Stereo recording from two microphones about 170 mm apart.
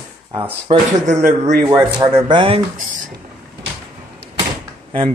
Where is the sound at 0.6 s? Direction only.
45° right (ahead or behind).